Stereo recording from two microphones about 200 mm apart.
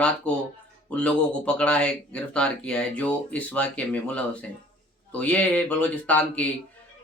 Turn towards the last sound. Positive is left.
turn(degrees=5)  # may be behind; listen again after turning